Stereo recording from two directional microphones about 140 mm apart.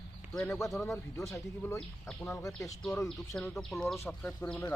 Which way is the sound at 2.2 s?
20° left (ahead or behind).